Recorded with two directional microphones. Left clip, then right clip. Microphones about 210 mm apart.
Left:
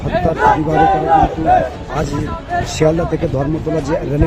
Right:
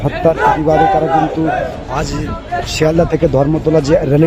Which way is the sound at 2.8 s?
15° right (ahead or behind).